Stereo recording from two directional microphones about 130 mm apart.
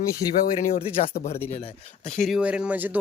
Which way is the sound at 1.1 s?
90° left.